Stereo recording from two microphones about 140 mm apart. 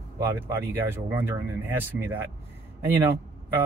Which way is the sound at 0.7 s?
15° right (ahead or behind).